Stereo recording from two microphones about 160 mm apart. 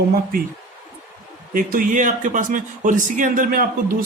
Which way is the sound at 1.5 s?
60° right (ahead or behind).